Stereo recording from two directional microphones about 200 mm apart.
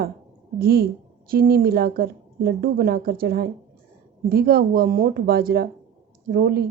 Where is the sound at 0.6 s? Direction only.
50° right (ahead or behind).